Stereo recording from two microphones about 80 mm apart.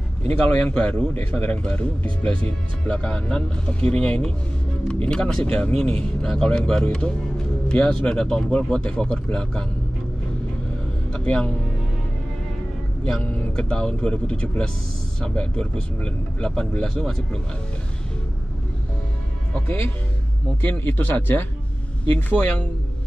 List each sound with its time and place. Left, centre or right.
0.3 s speech: left
11.1 s music: centre
13.2 s speech: centre
20.6 s speech: left